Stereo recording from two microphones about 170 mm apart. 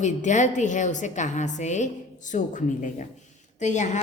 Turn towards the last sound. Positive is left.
turn(degrees=45)  # may be behind; listen again after turning